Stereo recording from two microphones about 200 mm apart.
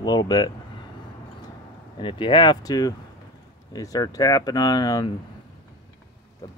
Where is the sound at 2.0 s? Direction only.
25° left (ahead or behind).